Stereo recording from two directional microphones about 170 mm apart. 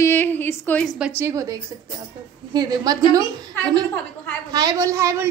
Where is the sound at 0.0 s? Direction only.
10° left (ahead or behind).